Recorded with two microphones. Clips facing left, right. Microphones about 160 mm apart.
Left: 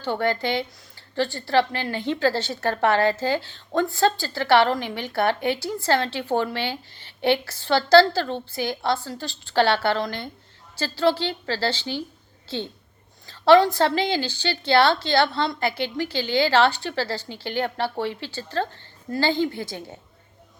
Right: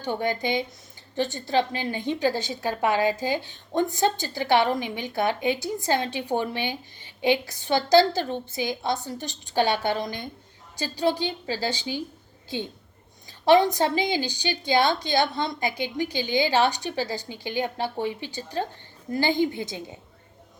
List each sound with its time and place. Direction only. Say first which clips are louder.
0.0 s a woman's voice: left 2 dB; 15° right (ahead or behind)
13.2 s a woman's voice: left 3 dB; 15° right (ahead or behind)